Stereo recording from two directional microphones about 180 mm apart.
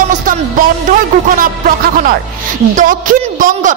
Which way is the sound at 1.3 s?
50° right (ahead or behind).